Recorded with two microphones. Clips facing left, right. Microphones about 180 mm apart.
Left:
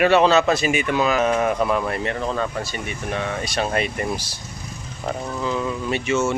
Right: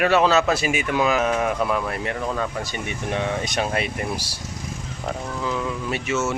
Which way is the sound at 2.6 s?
20° right (ahead or behind).